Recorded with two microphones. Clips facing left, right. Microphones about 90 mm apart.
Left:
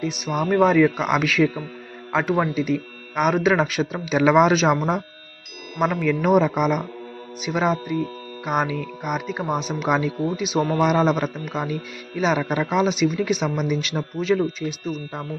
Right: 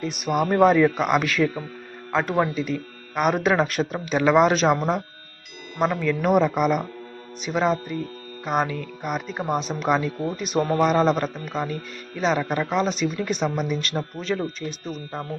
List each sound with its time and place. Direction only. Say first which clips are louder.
0.0 s speech: right 1 dB; centre (ahead or behind)
10.6 s a man's voice: even; 40° right (ahead or behind)
10.8 s speech: left 1 dB; 5° left (ahead or behind)